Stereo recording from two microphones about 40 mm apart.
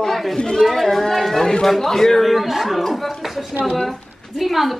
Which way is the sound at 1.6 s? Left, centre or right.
Centre.